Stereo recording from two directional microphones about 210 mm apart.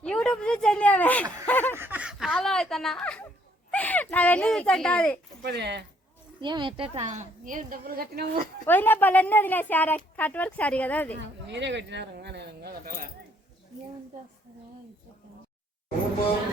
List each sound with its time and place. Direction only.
0.0 s speech: 5° left (ahead or behind)
1.5 s a sound: 10° left (ahead or behind)
1.7 s a sound: 10° right (ahead or behind)
3.7 s a child's voice: 5° left (ahead or behind)
5.4 s speech: 50° right (ahead or behind)
6.4 s a woman's voice: 20° right (ahead or behind); by 8.4 s 45° right (ahead or behind)
8.6 s a woman's voice: 10° left (ahead or behind)
11.4 s speech: 55° right (ahead or behind)